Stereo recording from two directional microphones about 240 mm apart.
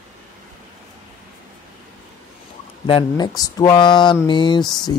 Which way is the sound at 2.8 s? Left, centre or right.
Centre.